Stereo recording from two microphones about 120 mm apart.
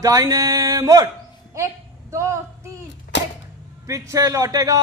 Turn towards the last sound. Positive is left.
turn(degrees=-30)  # may be behind; listen again after turning